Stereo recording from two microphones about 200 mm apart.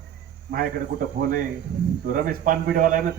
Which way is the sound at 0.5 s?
45° right (ahead or behind).